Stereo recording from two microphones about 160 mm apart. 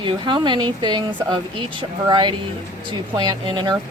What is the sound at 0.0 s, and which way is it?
A woman's voice, 30° right (ahead or behind).